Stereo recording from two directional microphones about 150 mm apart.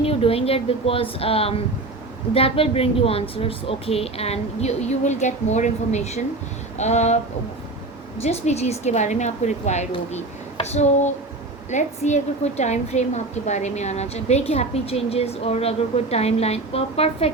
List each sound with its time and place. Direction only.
0.0 s a woman's voice: 40° left (ahead or behind)
8.2 s a woman's voice: 45° left (ahead or behind)